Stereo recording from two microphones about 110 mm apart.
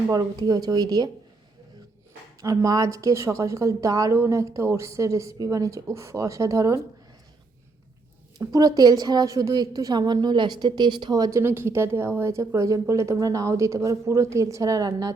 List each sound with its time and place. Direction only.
0.1 s a woman's voice: 35° right (ahead or behind)
2.4 s speech: 30° right (ahead or behind)
8.4 s a woman's voice: 35° right (ahead or behind)